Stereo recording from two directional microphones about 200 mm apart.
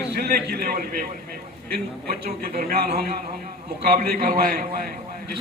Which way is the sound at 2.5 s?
50° right (ahead or behind).